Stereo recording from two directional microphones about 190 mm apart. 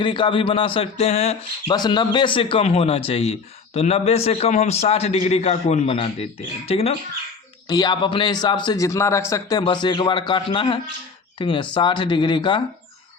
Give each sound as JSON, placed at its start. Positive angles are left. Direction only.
{"t": 0.0, "sound": "speech", "side_deg": 25}
{"t": 1.7, "sound": "a man's voice", "side_deg": 25}